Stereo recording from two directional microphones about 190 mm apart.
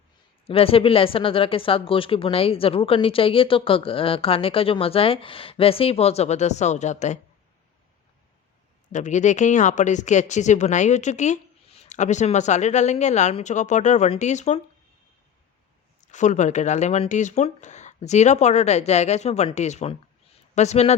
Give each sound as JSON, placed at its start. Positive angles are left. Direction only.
{"t": 0.4, "sound": "speech", "side_deg": 30}
{"t": 8.9, "sound": "speech", "side_deg": 40}
{"t": 16.0, "sound": "speech", "side_deg": 40}